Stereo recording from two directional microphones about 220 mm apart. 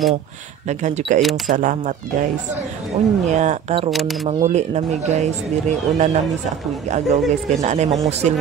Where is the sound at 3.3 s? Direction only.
35° right (ahead or behind).